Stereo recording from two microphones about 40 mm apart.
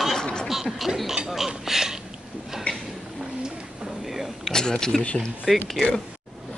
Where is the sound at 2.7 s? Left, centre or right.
Left.